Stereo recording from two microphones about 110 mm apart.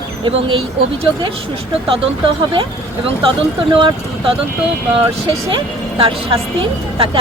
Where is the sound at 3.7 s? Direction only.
50° right (ahead or behind).